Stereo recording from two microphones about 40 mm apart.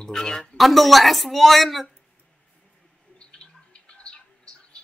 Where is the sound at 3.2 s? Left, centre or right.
Left.